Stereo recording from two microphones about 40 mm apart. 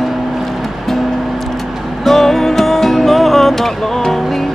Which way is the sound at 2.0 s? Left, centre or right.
Centre.